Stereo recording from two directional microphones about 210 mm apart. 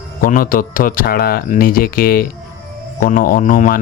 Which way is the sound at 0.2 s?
40° left (ahead or behind).